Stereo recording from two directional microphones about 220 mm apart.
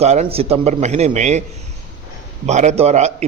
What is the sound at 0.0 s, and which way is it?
A man's voice, 30° right (ahead or behind).